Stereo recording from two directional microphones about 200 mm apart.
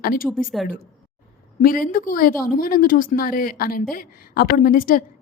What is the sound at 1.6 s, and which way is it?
A woman's voice, 45° left (ahead or behind).